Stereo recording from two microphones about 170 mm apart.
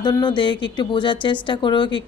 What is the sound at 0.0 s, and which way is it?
A woman's voice, 25° left (ahead or behind).